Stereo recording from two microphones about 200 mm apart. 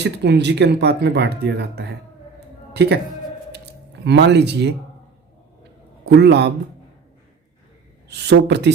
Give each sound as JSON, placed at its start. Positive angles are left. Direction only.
{"t": 0.0, "sound": "speech", "side_deg": -60}
{"t": 4.0, "sound": "speech", "side_deg": -60}
{"t": 6.1, "sound": "speech", "side_deg": -55}
{"t": 8.1, "sound": "speech", "side_deg": -55}